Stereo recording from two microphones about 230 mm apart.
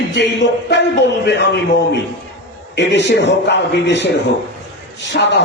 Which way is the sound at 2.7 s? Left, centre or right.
Left.